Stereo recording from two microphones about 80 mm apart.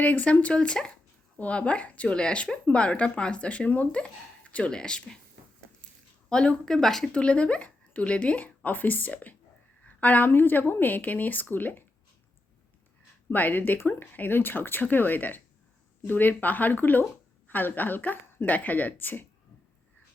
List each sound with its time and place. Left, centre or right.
0.0 s speech: centre
6.2 s a woman's voice: centre
13.3 s a woman's voice: left